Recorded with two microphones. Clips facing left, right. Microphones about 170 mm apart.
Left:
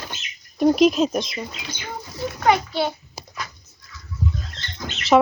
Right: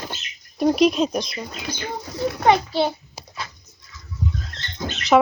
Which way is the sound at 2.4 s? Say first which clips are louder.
Right 1 dB; 30° right (ahead or behind).